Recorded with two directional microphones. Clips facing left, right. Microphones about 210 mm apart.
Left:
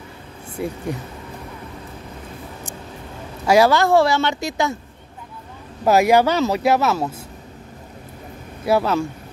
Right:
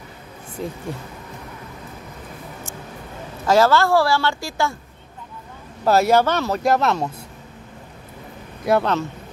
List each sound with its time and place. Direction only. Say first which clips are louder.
0.6 s speech: left 3 dB; 10° left (ahead or behind)
3.4 s a woman's voice: left 1 dB; 15° left (ahead or behind)
5.9 s speech: left 1 dB; 15° left (ahead or behind)
8.6 s speech: left 1 dB; 5° left (ahead or behind)